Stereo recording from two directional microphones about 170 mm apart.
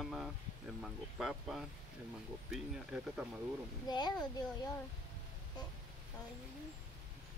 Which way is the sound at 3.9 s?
25° left (ahead or behind).